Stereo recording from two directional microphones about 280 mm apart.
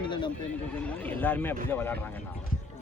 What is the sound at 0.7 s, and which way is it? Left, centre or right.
Speech, centre.